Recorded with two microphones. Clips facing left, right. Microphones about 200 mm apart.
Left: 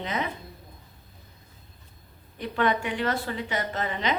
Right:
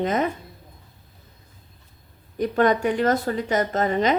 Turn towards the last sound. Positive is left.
turn(degrees=-45)  # may be behind; listen again after turning